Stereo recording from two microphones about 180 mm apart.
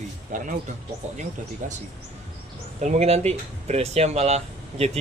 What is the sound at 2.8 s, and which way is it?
A man's voice, 35° right (ahead or behind).